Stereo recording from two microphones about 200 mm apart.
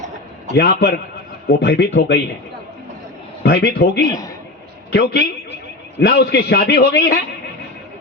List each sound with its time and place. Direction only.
0.5 s a man's voice: 55° left (ahead or behind)
3.4 s a man's voice: 55° left (ahead or behind)